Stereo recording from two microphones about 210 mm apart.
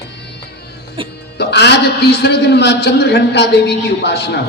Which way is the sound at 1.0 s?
25° right (ahead or behind).